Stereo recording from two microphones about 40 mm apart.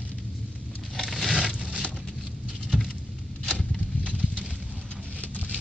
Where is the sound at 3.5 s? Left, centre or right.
Left.